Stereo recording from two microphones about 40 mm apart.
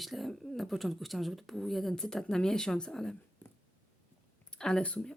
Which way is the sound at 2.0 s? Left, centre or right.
Centre.